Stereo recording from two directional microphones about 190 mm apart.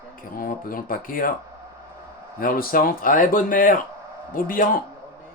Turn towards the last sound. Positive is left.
turn(degrees=45)  # may be behind; listen again after turning